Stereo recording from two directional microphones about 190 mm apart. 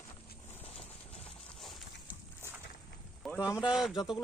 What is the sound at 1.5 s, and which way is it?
Clip-clop, centre (ahead or behind).